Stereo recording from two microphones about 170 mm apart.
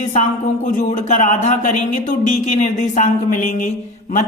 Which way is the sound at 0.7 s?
50° left (ahead or behind).